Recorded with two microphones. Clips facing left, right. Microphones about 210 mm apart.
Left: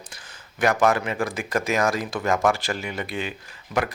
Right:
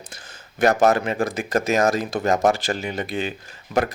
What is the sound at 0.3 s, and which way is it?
Speech, 40° right (ahead or behind).